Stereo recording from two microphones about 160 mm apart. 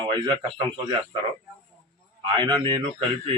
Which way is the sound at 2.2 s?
30° right (ahead or behind).